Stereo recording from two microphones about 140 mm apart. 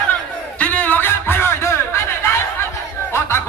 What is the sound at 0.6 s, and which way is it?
Music, 10° left (ahead or behind).